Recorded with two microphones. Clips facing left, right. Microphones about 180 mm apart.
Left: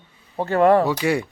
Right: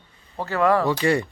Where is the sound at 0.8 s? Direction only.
10° left (ahead or behind).